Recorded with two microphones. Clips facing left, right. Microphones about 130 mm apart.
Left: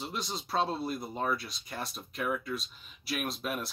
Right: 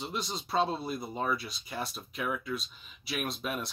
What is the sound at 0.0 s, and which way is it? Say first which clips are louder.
Speech: right 1 dB; centre (ahead or behind).